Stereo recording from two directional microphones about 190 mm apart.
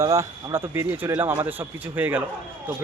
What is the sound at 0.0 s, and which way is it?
Speech, 15° right (ahead or behind).